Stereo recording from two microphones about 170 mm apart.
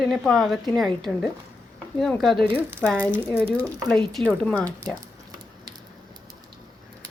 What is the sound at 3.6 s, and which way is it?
Speech, 20° right (ahead or behind).